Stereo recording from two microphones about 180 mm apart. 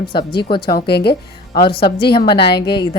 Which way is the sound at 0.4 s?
25° left (ahead or behind).